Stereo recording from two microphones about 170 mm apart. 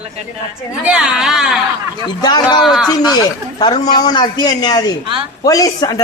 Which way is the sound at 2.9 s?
25° left (ahead or behind).